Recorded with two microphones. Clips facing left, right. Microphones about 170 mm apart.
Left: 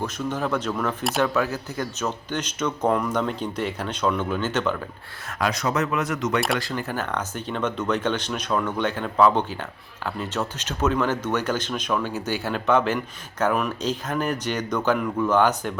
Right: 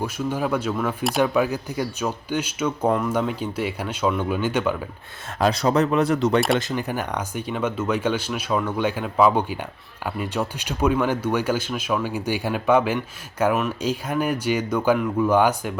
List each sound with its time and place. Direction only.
0.0 s speech: 10° right (ahead or behind)
1.2 s speech: 15° right (ahead or behind)
5.4 s speech: 30° right (ahead or behind)
6.6 s speech: 20° right (ahead or behind)